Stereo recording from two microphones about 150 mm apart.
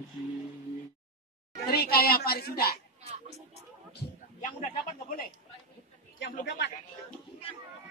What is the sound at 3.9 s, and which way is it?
Music, 60° left (ahead or behind).